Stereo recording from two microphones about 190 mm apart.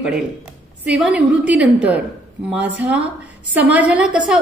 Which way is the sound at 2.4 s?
5° right (ahead or behind).